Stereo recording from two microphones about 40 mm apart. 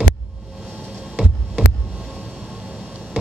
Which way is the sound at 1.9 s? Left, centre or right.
Right.